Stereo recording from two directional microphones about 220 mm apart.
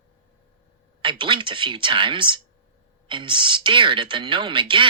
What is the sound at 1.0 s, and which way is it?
Speech, 20° right (ahead or behind).